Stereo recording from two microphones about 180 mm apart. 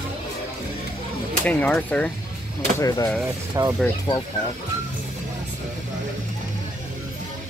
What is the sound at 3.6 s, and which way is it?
Speech, 15° right (ahead or behind).